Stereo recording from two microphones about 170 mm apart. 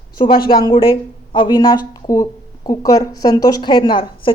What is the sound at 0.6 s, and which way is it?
A woman's voice, 30° left (ahead or behind).